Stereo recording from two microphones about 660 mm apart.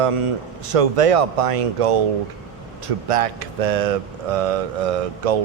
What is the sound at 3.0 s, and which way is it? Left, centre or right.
Speech, right.